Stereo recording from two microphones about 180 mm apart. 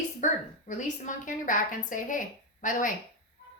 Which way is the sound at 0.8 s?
45° left (ahead or behind).